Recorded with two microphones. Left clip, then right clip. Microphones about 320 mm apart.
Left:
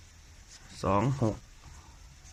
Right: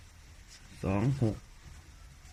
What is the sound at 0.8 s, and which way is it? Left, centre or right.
Speech, left.